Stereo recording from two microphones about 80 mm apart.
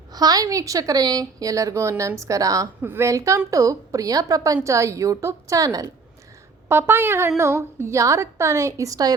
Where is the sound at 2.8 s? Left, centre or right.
Right.